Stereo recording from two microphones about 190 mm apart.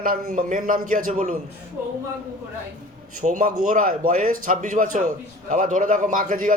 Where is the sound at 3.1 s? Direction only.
45° right (ahead or behind).